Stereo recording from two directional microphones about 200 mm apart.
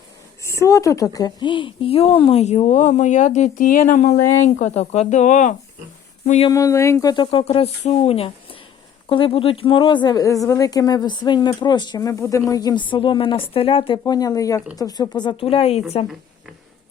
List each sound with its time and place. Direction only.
0.4 s a woman's voice: 15° left (ahead or behind); by 6.5 s 35° left (ahead or behind)
6.5 s speech: 15° left (ahead or behind); by 16.0 s 30° left (ahead or behind)